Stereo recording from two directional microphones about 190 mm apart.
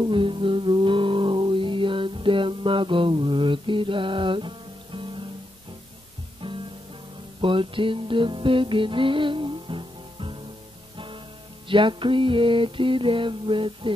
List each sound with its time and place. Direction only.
0.0 s music: 25° right (ahead or behind)
6.4 s music: 25° right (ahead or behind)
11.7 s mantra: 25° right (ahead or behind)